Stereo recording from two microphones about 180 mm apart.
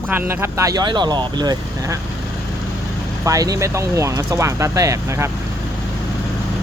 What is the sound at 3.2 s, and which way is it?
Speech, 20° right (ahead or behind).